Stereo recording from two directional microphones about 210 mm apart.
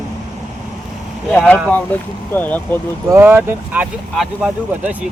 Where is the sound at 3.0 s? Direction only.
10° right (ahead or behind).